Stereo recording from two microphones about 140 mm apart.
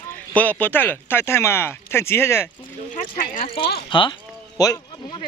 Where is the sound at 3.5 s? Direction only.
35° left (ahead or behind).